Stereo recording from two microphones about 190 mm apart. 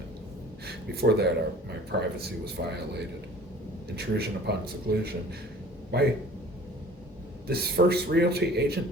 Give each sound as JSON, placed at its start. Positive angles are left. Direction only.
{"t": 0.6, "sound": "a man's voice", "side_deg": -60}
{"t": 7.4, "sound": "a man's voice", "side_deg": -55}